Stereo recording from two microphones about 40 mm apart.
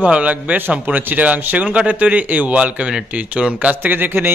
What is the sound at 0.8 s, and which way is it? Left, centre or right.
Speech, right.